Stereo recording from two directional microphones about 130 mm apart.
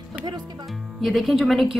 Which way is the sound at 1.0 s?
Centre (ahead or behind).